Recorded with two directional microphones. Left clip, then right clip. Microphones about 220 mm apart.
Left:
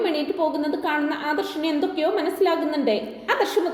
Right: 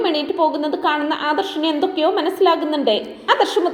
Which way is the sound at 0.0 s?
15° right (ahead or behind).